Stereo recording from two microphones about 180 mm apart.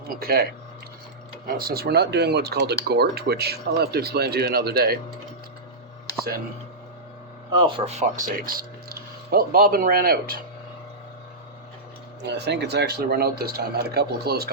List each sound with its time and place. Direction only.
0.2 s speech: 60° right (ahead or behind)
1.5 s speech: 55° right (ahead or behind)
7.6 s speech: 35° right (ahead or behind); by 10.4 s 55° right (ahead or behind)
12.2 s speech: 70° right (ahead or behind)